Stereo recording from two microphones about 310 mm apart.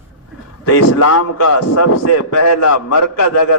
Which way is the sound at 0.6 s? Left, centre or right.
Left.